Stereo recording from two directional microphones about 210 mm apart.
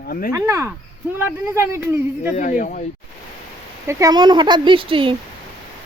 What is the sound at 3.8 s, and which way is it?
Speech, 20° right (ahead or behind).